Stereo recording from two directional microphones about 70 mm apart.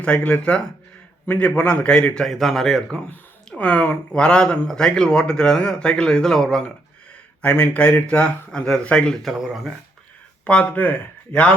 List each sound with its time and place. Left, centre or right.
0.0 s speech: centre
3.6 s speech: centre
7.4 s speech: centre
9.2 s speech: centre
10.4 s speech: centre